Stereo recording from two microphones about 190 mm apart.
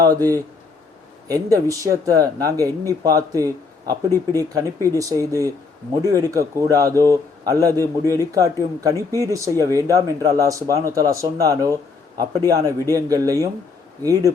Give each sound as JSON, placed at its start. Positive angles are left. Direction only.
{"t": 0.0, "sound": "a man's voice", "side_deg": -20}